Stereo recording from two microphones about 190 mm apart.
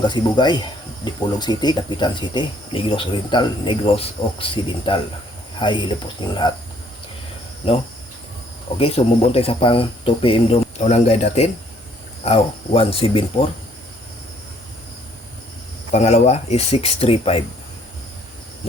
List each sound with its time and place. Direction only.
0.1 s speech: 25° left (ahead or behind)
8.8 s speech: 30° left (ahead or behind)
15.9 s speech: 35° left (ahead or behind)